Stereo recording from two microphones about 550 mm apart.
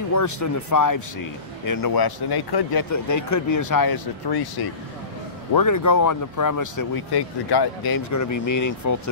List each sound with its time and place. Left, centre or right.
0.1 s speech: left